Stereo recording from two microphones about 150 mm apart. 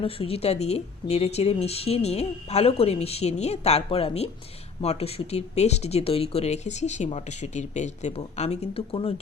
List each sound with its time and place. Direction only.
0.0 s speech: 40° left (ahead or behind)